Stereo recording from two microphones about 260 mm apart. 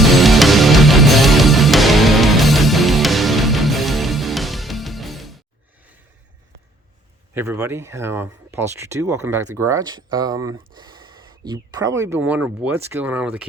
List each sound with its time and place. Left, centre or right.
0.0 s music: centre
7.3 s speech: centre
10.8 s a sound: centre
11.4 s speech: centre